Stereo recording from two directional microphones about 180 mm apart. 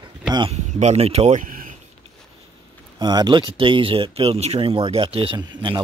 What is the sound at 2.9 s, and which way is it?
Speech, 25° right (ahead or behind).